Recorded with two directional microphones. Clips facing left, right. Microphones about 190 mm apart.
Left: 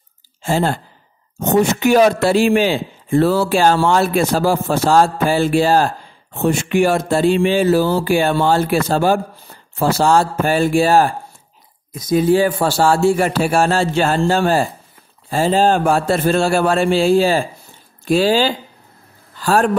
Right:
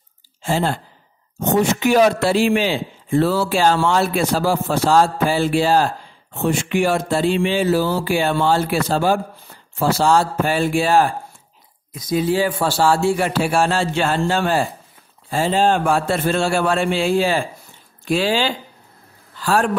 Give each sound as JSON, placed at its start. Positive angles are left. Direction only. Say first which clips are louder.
{"t": 0.4, "sound": "a man's voice", "louder": "left 3 dB", "side_deg": 45}